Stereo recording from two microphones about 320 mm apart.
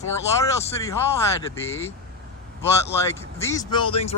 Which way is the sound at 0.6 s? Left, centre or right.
Centre.